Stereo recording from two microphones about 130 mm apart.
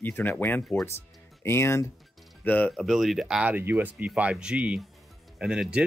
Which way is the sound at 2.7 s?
Centre (ahead or behind).